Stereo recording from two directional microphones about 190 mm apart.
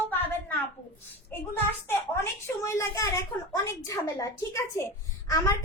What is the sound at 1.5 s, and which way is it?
Speech, 10° left (ahead or behind).